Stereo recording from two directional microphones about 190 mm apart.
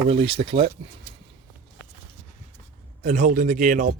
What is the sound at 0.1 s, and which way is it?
Speech, 30° right (ahead or behind).